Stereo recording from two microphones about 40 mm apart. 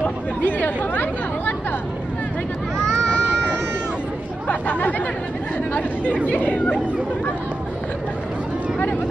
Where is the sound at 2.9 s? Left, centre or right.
Left.